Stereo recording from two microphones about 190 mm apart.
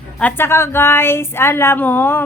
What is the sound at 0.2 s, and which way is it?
A woman's voice, 10° left (ahead or behind).